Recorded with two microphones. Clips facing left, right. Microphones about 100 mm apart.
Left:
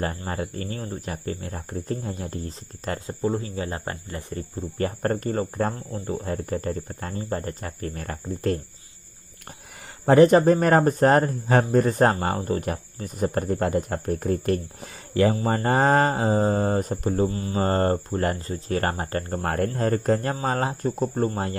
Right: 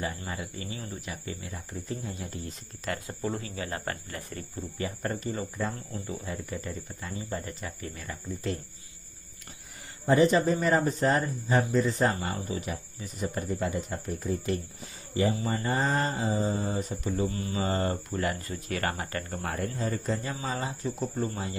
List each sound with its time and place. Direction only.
0.0 s speech: 45° left (ahead or behind)
3.1 s speech: 25° left (ahead or behind)
4.7 s speech: 50° left (ahead or behind)
10.0 s speech: 60° left (ahead or behind); by 17.6 s 35° left (ahead or behind)
17.6 s speech: 50° left (ahead or behind)
19.4 s speech: 55° left (ahead or behind)
21.0 s speech: 45° left (ahead or behind)